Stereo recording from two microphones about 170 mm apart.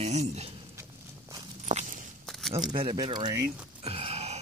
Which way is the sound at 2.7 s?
25° right (ahead or behind).